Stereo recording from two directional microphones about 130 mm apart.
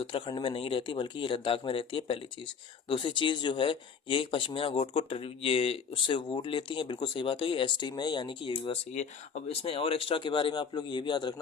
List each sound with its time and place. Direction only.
0.0 s speech: 40° left (ahead or behind)
8.9 s speech: 60° left (ahead or behind); by 11.3 s 35° left (ahead or behind)